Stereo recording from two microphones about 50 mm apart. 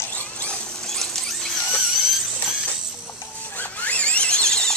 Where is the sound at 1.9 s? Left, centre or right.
Centre.